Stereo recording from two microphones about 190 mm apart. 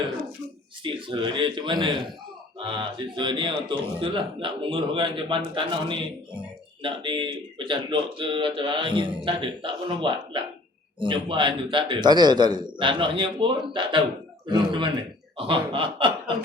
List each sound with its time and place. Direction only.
0.9 s speech: 25° right (ahead or behind)